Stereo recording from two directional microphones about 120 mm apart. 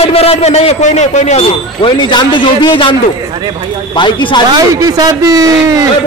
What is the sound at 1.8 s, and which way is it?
A man's voice, 40° left (ahead or behind).